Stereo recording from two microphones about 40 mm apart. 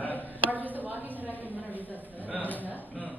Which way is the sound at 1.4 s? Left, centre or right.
Right.